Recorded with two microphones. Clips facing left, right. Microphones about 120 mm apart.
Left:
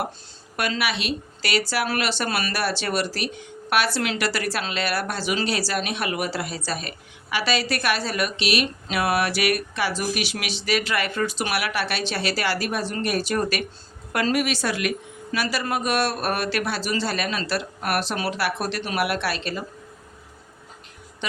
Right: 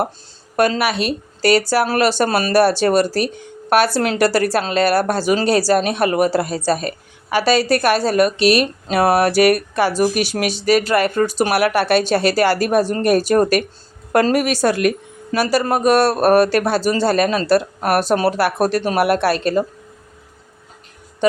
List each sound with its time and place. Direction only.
0.5 s a woman's voice: 40° right (ahead or behind)